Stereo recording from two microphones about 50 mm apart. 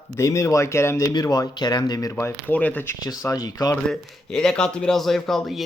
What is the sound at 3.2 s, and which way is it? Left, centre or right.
Speech, left.